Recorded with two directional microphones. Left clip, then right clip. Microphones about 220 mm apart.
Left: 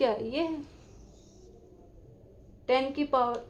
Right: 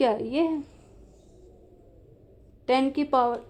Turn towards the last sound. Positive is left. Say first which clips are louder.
# right 4 dB
turn(degrees=-45)  # may be behind; listen again after turning